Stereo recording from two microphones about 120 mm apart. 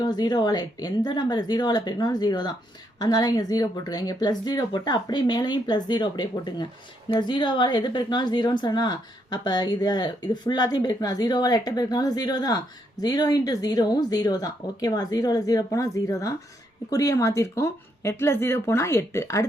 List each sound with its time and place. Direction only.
0.0 s a woman's voice: 35° left (ahead or behind)